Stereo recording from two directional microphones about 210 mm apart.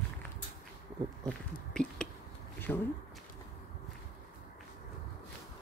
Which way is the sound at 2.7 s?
5° left (ahead or behind).